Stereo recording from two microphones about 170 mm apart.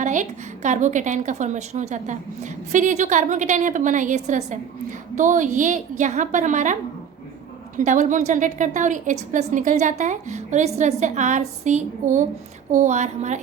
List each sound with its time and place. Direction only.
0.0 s a woman's voice: 45° right (ahead or behind)
7.8 s a woman's voice: 45° right (ahead or behind)